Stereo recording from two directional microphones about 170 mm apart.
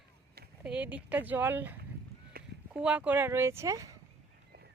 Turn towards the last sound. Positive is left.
turn(degrees=-20)  # may be behind; listen again after turning